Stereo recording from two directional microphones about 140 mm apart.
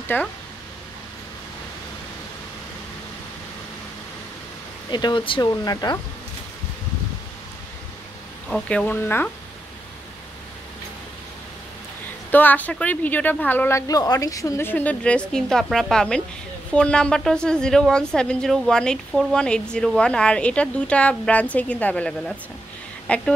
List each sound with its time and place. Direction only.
0.1 s speech: 15° left (ahead or behind)
4.9 s speech: 35° left (ahead or behind)
8.5 s speech: 5° left (ahead or behind)
12.3 s speech: 15° left (ahead or behind)